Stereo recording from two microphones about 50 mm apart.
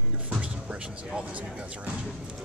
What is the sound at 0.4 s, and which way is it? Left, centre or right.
Music, right.